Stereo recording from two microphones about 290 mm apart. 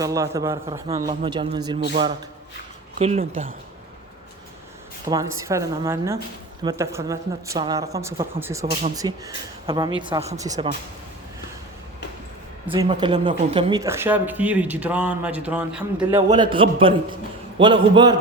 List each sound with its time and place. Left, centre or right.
0.0 s speech: centre
5.0 s speech: centre
12.7 s speech: centre